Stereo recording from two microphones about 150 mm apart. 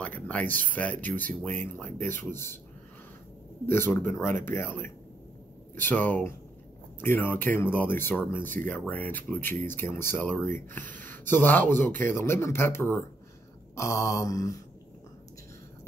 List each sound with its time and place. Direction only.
0.0 s a sound: 10° left (ahead or behind)
0.7 s speech: 10° left (ahead or behind)
3.6 s speech: 15° left (ahead or behind)
13.7 s mantra: 20° left (ahead or behind)